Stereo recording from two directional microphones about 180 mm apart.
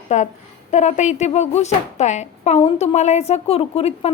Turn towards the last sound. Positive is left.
turn(degrees=35)  # may be behind; listen again after turning